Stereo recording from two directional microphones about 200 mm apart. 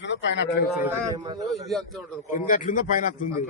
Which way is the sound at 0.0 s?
65° left (ahead or behind).